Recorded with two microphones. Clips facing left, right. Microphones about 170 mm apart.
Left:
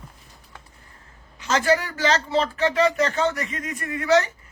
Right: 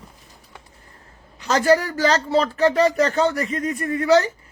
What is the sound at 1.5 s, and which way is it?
Speech, 40° right (ahead or behind).